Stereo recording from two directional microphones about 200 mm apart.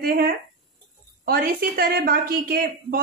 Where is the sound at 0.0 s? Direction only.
45° right (ahead or behind).